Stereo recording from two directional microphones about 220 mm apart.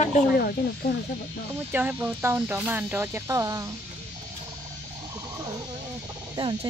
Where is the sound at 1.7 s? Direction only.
10° right (ahead or behind).